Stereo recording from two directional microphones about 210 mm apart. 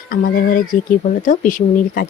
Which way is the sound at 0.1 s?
40° left (ahead or behind).